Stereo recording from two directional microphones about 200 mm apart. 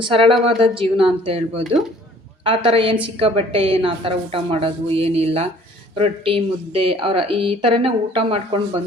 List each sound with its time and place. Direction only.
0.0 s speech: 25° right (ahead or behind)